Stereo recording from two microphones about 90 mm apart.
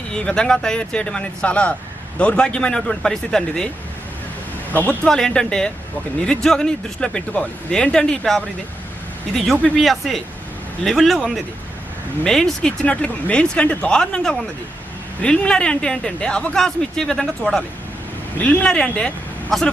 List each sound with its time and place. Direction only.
0.1 s speech: 10° left (ahead or behind)
4.7 s speech: 20° left (ahead or behind)
5.0 s speech: 5° left (ahead or behind)
18.3 s speech: 15° left (ahead or behind)